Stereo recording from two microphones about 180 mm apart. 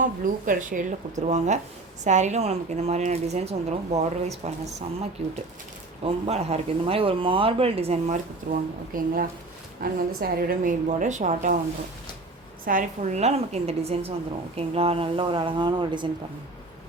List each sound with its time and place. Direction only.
0.0 s a woman's voice: 50° right (ahead or behind)
6.0 s speech: 35° right (ahead or behind)
8.5 s a woman's voice: 60° right (ahead or behind); by 11.5 s 45° right (ahead or behind)
12.6 s speech: 45° right (ahead or behind); by 16.0 s 25° right (ahead or behind)